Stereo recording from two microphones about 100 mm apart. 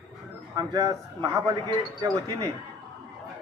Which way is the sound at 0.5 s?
35° right (ahead or behind).